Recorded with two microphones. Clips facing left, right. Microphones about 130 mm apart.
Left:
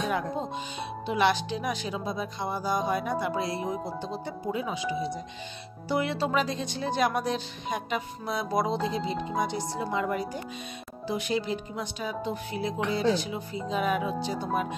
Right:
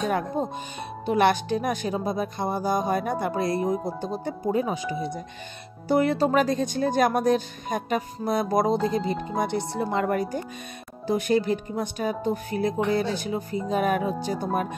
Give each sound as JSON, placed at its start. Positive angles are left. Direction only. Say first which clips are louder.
{"t": 0.0, "sound": "music", "louder": "right 4 dB", "side_deg": -45}
{"t": 1.0, "sound": "speech", "louder": "right 4 dB", "side_deg": -50}
{"t": 5.9, "sound": "speech", "louder": "right 6 dB", "side_deg": -45}